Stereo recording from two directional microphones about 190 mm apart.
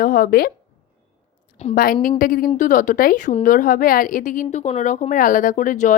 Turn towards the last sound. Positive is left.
turn(degrees=40)  # may be behind; listen again after turning